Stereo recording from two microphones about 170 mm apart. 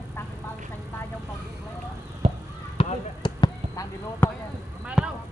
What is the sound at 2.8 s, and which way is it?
Basketball bounce, 30° left (ahead or behind).